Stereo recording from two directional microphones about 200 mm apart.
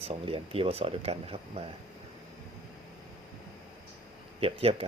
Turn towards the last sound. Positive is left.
turn(degrees=-30)  # may be behind; listen again after turning